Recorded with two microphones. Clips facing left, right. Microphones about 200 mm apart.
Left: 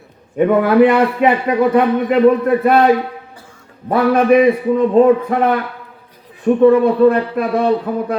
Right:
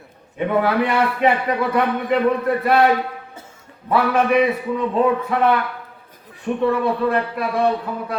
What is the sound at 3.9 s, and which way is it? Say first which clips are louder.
Speech: left 6 dB; 45° left (ahead or behind).